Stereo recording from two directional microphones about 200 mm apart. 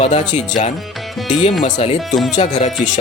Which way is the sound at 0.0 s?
35° left (ahead or behind).